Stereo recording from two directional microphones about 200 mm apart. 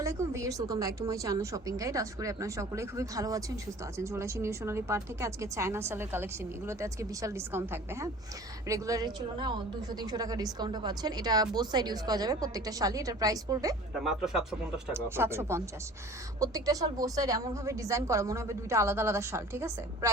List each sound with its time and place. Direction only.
0.0 s a woman's voice: 15° right (ahead or behind)
14.0 s a woman's voice: centre (ahead or behind)